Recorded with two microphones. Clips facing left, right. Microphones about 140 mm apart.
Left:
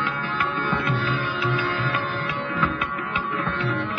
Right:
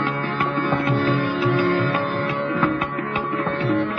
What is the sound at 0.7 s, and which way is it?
Music, 45° right (ahead or behind).